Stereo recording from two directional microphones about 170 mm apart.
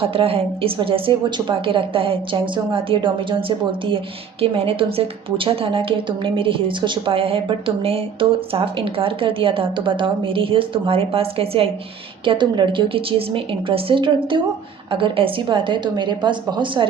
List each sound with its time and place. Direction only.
0.0 s a woman's voice: 35° right (ahead or behind)